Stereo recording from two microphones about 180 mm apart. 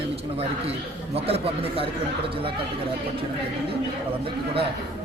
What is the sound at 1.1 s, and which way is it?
Speech, 35° right (ahead or behind).